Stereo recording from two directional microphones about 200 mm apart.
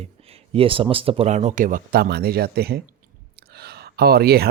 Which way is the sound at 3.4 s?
50° right (ahead or behind).